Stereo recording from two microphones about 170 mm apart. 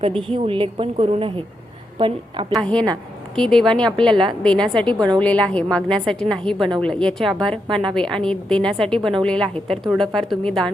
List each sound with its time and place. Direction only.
0.1 s a woman's voice: centre (ahead or behind)
0.3 s a woman's voice: 30° right (ahead or behind)
2.5 s a woman's voice: 5° left (ahead or behind)